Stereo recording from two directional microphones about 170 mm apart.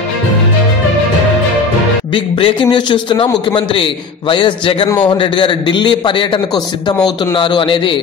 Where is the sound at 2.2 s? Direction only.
30° left (ahead or behind).